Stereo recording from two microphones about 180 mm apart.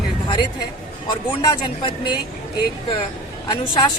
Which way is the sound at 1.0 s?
25° left (ahead or behind).